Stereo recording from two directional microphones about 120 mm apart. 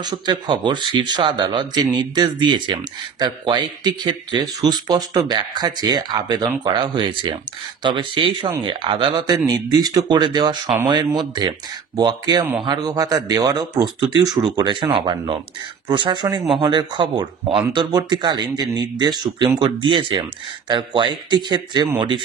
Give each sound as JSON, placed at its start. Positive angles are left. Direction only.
{"t": 0.0, "sound": "speech", "side_deg": -35}
{"t": 9.5, "sound": "speech", "side_deg": -35}